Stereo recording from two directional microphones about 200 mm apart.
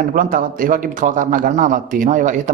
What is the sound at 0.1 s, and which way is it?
Speech, 45° right (ahead or behind).